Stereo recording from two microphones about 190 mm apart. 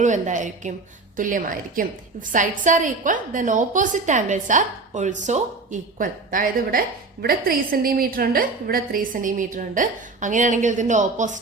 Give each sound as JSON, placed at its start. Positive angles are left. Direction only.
{"t": 0.0, "sound": "a woman's voice", "side_deg": -40}